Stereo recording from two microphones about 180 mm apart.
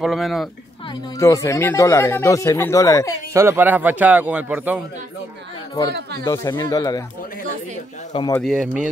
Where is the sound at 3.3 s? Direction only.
15° right (ahead or behind).